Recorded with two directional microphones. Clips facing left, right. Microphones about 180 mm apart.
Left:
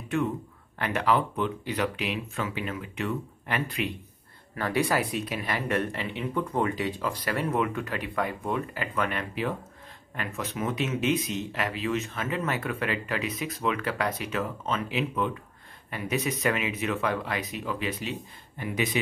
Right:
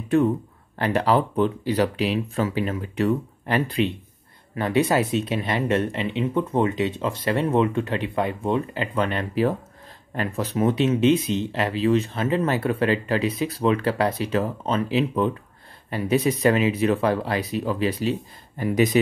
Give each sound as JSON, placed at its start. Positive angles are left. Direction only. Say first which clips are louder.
{"t": 0.7, "sound": "speech", "louder": "right 5 dB", "side_deg": -35}